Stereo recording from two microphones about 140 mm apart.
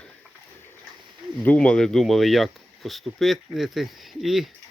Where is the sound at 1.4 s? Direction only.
10° left (ahead or behind).